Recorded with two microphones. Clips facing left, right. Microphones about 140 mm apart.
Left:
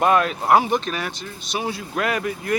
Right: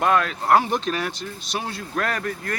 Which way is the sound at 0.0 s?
15° left (ahead or behind).